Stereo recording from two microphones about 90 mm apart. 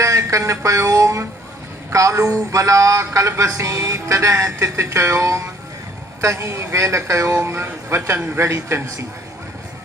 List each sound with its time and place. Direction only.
0.0 s speech: 35° right (ahead or behind)